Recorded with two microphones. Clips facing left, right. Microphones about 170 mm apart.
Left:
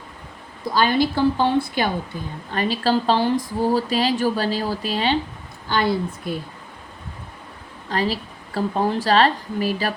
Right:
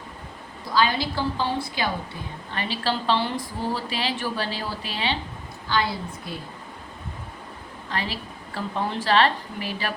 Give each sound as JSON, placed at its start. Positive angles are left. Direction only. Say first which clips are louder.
{"t": 0.8, "sound": "a woman's voice", "louder": "left 5 dB", "side_deg": 55}
{"t": 2.5, "sound": "a woman's voice", "louder": "left 7 dB", "side_deg": 40}
{"t": 7.9, "sound": "a woman's voice", "louder": "left 7 dB", "side_deg": 40}